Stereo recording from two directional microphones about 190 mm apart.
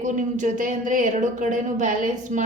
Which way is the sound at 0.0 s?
40° right (ahead or behind).